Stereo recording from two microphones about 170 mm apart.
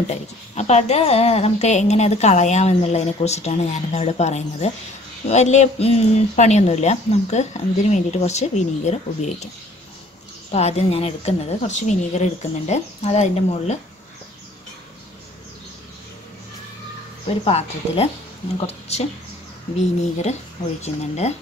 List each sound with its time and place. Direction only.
0.1 s a woman's voice: 40° left (ahead or behind)
10.5 s a woman's voice: 40° left (ahead or behind)
17.5 s a woman's voice: 35° left (ahead or behind)
20.8 s a woman's voice: 40° left (ahead or behind)